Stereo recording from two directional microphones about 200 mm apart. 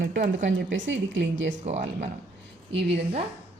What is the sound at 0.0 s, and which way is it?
Speech, 40° right (ahead or behind).